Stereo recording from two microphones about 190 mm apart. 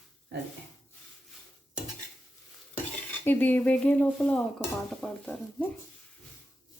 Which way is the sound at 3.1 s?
10° left (ahead or behind).